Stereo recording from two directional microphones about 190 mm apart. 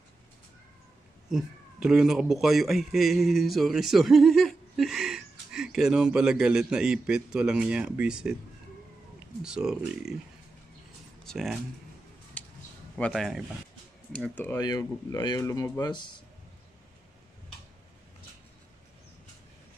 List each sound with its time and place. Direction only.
1.3 s a man's voice: 5° right (ahead or behind)
9.4 s a man's voice: 5° right (ahead or behind)
11.2 s speech: centre (ahead or behind)
12.4 s a sound: 5° left (ahead or behind)
12.9 s speech: centre (ahead or behind); by 16.2 s 25° left (ahead or behind)